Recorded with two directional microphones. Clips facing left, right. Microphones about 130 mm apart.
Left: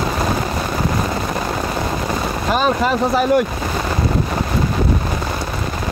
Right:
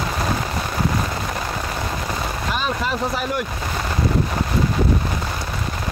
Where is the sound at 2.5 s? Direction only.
45° left (ahead or behind).